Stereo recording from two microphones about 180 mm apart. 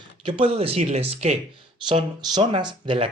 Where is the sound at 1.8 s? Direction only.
25° right (ahead or behind).